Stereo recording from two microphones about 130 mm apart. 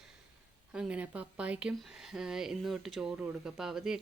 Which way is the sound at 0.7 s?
5° right (ahead or behind).